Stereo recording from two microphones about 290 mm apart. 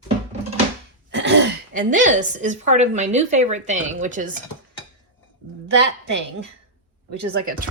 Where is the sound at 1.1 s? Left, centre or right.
Right.